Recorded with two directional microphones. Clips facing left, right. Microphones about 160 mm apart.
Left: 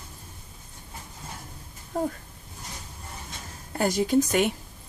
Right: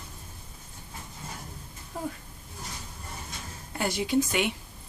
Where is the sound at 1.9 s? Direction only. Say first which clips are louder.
Left 7 dB; 45° left (ahead or behind).